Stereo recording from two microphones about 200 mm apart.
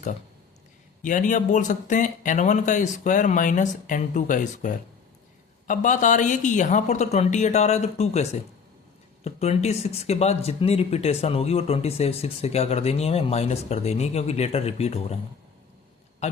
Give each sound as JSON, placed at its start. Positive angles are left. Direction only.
{"t": 1.0, "sound": "speech", "side_deg": 40}
{"t": 16.2, "sound": "a man's voice", "side_deg": 35}